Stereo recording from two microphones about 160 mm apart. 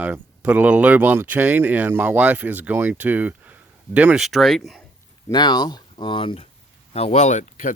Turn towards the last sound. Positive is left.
turn(degrees=50)  # may be behind; listen again after turning